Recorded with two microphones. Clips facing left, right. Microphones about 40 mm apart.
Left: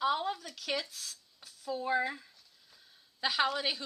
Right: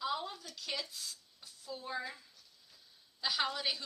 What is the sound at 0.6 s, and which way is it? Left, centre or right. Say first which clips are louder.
Speech: left 5 dB; left.